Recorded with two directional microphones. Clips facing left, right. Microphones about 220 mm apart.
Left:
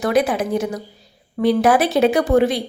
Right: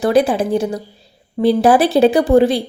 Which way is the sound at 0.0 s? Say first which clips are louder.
Right 4 dB; 30° right (ahead or behind).